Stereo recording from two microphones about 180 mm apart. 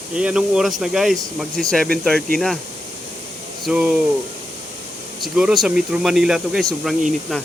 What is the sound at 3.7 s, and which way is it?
Speech, 5° right (ahead or behind).